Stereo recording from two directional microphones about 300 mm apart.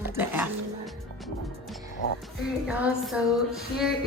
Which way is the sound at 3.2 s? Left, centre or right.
Centre.